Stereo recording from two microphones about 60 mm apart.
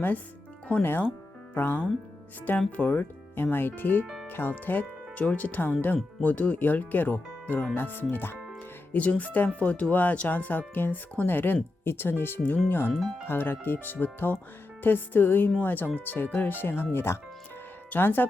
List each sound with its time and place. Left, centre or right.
0.8 s speech: left
4.0 s speech: centre
4.3 s speech: left
8.9 s speech: left